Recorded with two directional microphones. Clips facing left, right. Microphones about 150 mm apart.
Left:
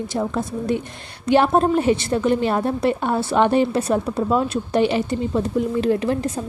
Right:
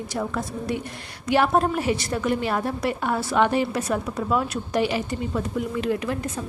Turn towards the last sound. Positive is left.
turn(degrees=30)  # may be behind; listen again after turning